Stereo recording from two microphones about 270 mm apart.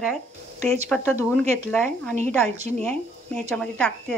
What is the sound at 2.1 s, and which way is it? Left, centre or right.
Speech, right.